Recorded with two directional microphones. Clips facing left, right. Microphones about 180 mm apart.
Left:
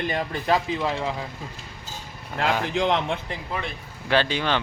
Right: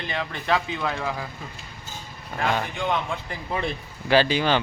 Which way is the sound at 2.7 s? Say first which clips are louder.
Left 4 dB; 90° left.